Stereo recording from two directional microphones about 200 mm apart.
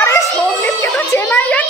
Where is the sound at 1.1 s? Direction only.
10° left (ahead or behind).